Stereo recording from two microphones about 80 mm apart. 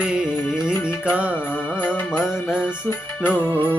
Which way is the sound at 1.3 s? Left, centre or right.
Left.